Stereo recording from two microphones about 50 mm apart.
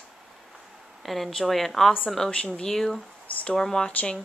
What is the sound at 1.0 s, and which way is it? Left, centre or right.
A woman's voice, centre.